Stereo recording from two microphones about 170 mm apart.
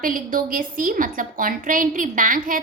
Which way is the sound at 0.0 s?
55° right (ahead or behind).